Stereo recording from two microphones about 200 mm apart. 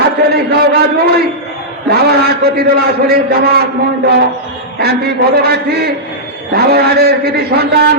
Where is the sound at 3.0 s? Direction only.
50° right (ahead or behind).